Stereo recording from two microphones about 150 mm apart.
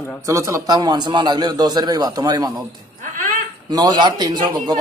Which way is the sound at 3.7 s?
30° right (ahead or behind).